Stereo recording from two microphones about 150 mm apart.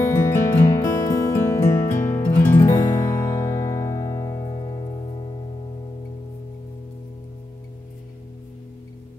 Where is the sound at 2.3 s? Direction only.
15° left (ahead or behind).